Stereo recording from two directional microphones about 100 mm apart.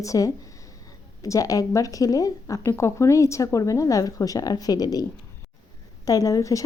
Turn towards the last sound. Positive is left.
turn(degrees=35)  # may be behind; listen again after turning